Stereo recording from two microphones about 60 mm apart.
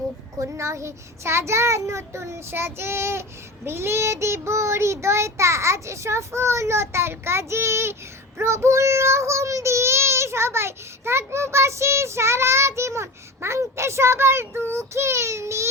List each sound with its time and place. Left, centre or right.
0.3 s child singing: right